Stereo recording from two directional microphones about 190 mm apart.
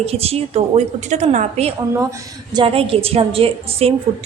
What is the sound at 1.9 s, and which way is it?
Speech, 15° right (ahead or behind).